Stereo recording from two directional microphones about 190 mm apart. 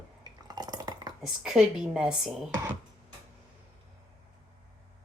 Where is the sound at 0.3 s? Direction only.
20° right (ahead or behind).